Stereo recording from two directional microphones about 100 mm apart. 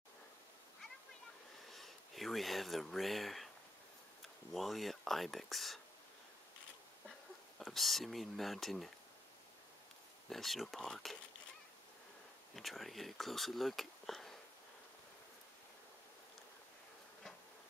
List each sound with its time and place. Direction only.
1.7 s speech: centre (ahead or behind)
4.6 s speech: centre (ahead or behind)
7.5 s speech: centre (ahead or behind)
10.3 s speech: centre (ahead or behind)
12.5 s speech: centre (ahead or behind)